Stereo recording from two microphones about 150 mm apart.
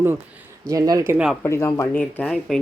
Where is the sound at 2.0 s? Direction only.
10° left (ahead or behind).